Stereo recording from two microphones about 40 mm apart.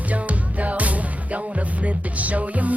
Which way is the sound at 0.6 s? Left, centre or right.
Right.